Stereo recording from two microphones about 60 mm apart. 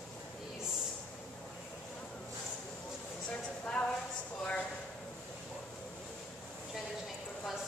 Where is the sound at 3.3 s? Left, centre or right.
Left.